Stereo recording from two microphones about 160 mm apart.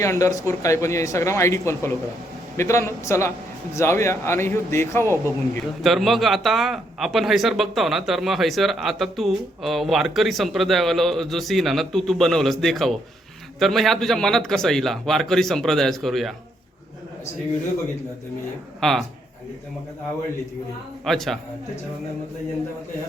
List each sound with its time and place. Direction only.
0.0 s speech: 20° left (ahead or behind)
5.0 s speech: 15° right (ahead or behind)
5.8 s a man's voice: centre (ahead or behind)
18.8 s speech: centre (ahead or behind)
21.0 s a man's voice: centre (ahead or behind)